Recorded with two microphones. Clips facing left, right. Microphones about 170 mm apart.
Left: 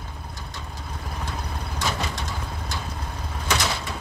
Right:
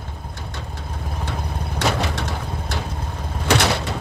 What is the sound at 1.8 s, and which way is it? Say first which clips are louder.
Vehicle: right 6 dB; 70° right (ahead or behind).